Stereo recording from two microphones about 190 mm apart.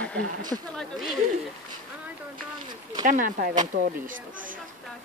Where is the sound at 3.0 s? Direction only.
45° right (ahead or behind).